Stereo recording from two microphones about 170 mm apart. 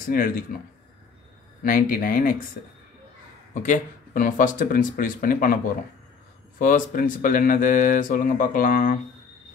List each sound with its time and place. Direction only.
0.1 s speech: 60° left (ahead or behind)
1.6 s speech: 55° left (ahead or behind)
3.6 s speech: 55° left (ahead or behind)
6.6 s speech: 55° left (ahead or behind)